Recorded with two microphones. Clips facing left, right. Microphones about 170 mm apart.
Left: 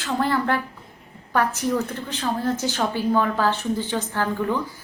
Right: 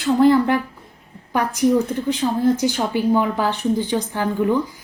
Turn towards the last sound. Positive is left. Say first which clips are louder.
# right 4 dB
turn(degrees=-15)  # may be behind; listen again after turning